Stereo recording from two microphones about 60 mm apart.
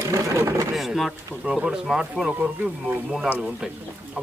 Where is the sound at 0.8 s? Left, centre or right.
Centre.